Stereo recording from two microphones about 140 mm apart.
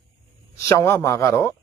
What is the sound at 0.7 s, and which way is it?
Speech, 20° left (ahead or behind).